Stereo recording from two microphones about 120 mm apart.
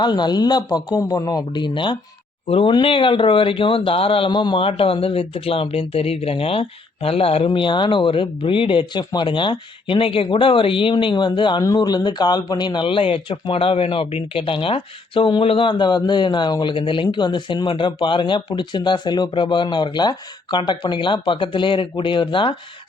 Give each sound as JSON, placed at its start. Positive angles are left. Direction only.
{"t": 0.0, "sound": "speech", "side_deg": 35}